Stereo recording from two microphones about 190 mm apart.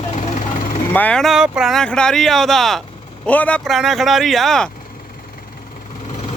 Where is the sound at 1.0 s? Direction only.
5° left (ahead or behind).